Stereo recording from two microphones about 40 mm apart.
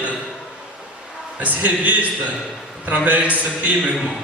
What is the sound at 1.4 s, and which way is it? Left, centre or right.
A man's voice, right.